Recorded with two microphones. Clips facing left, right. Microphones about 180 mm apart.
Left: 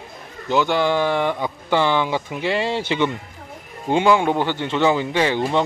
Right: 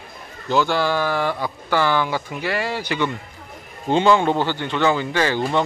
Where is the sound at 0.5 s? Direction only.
15° left (ahead or behind).